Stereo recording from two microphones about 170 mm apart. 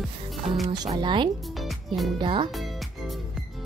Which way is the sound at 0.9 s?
30° right (ahead or behind).